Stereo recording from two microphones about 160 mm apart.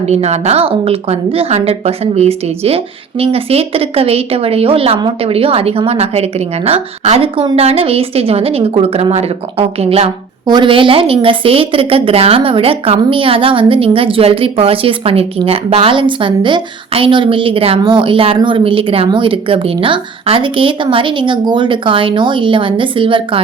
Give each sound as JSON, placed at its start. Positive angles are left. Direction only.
{"t": 0.1, "sound": "a woman's voice", "side_deg": -45}
{"t": 10.4, "sound": "a woman's voice", "side_deg": -30}